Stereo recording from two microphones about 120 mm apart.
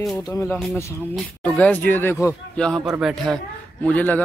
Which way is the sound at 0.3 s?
20° left (ahead or behind).